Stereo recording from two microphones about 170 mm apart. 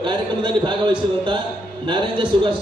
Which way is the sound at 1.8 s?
30° right (ahead or behind).